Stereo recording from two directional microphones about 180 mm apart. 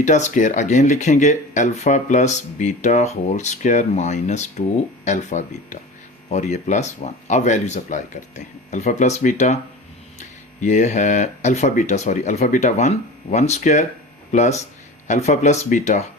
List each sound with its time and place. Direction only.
0.0 s speech: 40° left (ahead or behind)